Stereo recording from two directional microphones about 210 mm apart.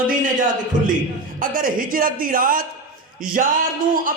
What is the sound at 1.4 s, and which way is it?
A man's voice, 40° right (ahead or behind).